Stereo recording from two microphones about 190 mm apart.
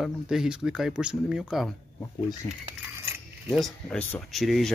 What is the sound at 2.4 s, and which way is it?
Speech, 20° left (ahead or behind).